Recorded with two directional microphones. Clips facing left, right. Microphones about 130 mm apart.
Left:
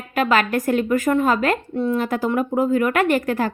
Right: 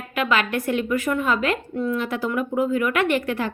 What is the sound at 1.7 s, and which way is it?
Speech, 30° left (ahead or behind).